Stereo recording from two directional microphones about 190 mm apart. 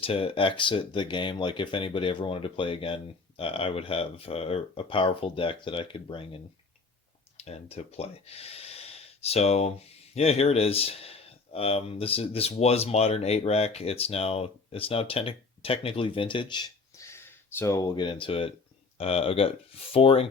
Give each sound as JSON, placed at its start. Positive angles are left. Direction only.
{"t": 0.0, "sound": "speech", "side_deg": 30}